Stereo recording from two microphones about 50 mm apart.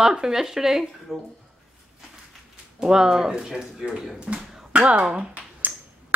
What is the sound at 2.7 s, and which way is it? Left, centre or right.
Speech, centre.